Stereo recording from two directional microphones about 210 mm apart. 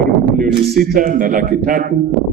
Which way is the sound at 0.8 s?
45° right (ahead or behind).